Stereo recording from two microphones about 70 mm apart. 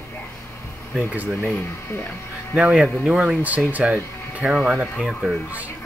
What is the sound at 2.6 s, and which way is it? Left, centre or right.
Speech, centre.